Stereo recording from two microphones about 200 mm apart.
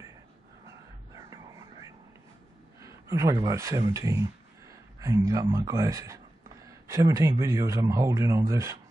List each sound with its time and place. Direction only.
1.1 s music: 15° right (ahead or behind)
2.8 s speech: 15° right (ahead or behind)